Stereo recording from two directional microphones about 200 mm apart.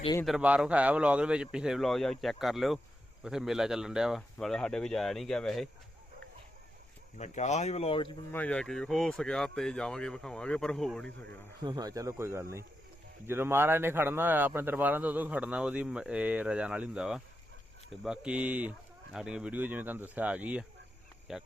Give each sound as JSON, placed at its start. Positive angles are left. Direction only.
{"t": 0.3, "sound": "speech", "side_deg": -5}
{"t": 7.2, "sound": "speech", "side_deg": 35}
{"t": 8.3, "sound": "speech", "side_deg": 5}
{"t": 11.6, "sound": "speech", "side_deg": -20}